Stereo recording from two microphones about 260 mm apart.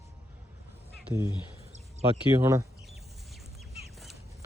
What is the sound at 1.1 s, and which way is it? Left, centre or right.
Speech, centre.